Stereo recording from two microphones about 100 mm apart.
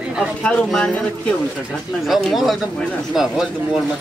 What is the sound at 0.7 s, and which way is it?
Speech, 5° left (ahead or behind).